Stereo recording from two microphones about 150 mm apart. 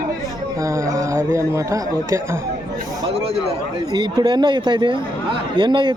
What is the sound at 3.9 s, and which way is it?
A man's voice, 30° right (ahead or behind).